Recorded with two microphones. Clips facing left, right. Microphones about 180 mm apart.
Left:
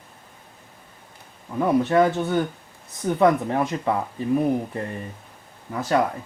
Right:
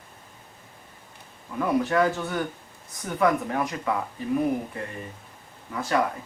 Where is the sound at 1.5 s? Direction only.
25° left (ahead or behind).